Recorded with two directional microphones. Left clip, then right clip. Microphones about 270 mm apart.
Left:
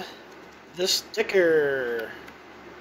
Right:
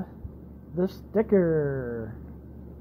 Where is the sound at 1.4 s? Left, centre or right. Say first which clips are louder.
Left 4 dB; centre.